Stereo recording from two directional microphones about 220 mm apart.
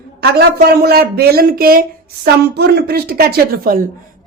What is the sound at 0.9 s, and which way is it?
Speech, 45° right (ahead or behind).